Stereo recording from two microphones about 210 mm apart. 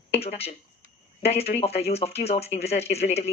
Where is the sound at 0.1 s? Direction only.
30° left (ahead or behind).